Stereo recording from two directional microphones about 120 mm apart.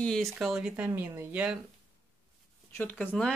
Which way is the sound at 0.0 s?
5° left (ahead or behind).